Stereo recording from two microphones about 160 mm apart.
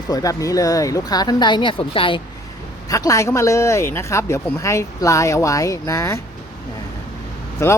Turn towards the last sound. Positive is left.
turn(degrees=20)  # may be behind; listen again after turning